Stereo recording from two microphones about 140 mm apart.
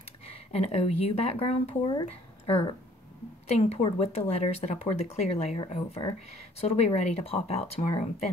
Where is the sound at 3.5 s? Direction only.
45° left (ahead or behind).